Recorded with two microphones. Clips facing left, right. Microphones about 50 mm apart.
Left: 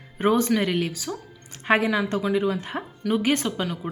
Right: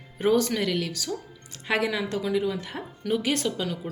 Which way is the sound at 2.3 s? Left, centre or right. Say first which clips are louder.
Left 3 dB; left.